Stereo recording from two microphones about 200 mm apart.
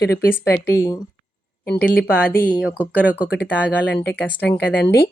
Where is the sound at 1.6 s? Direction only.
50° left (ahead or behind).